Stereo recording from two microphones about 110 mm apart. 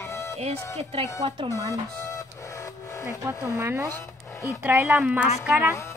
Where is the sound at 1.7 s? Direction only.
30° left (ahead or behind).